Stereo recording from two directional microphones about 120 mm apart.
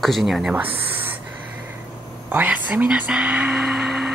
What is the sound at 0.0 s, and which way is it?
Speech, centre (ahead or behind).